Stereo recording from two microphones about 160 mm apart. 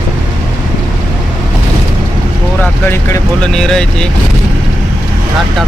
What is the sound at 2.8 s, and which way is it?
Vehicle, 15° left (ahead or behind).